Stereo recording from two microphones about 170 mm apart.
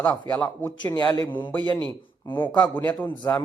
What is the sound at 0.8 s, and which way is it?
Speech, 25° left (ahead or behind).